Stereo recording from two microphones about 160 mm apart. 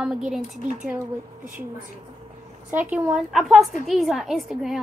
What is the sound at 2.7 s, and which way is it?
A woman's voice, 10° right (ahead or behind).